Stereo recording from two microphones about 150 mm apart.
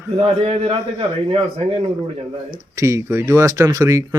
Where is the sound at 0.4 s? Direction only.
40° right (ahead or behind).